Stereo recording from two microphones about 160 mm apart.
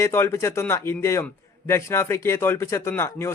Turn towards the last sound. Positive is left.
turn(degrees=15)  # may be behind; listen again after turning